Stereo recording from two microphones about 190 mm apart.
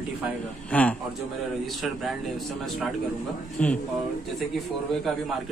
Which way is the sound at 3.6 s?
5° left (ahead or behind).